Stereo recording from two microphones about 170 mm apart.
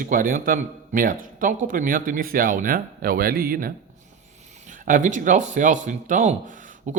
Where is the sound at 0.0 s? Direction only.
55° right (ahead or behind).